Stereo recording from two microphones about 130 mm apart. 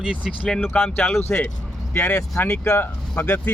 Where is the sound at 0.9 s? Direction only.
15° left (ahead or behind).